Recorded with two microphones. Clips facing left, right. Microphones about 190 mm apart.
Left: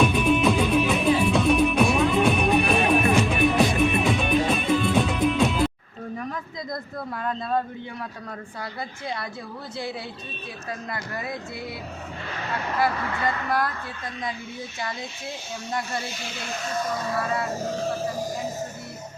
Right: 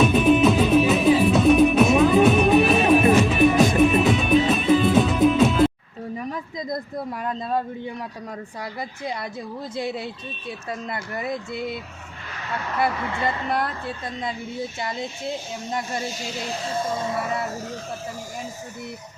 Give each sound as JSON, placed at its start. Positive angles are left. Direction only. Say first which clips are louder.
{"t": 0.0, "sound": "music", "louder": "right 4 dB", "side_deg": 0}
{"t": 6.1, "sound": "a sound", "louder": "right 3 dB", "side_deg": -15}
{"t": 9.7, "sound": "speech", "louder": "right 4 dB", "side_deg": -20}
{"t": 12.8, "sound": "speech", "louder": "right 1 dB", "side_deg": -25}
{"t": 16.5, "sound": "speech", "louder": "right 1 dB", "side_deg": -30}